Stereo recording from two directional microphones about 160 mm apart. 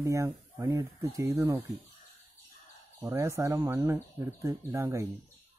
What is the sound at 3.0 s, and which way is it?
Speech, 20° right (ahead or behind).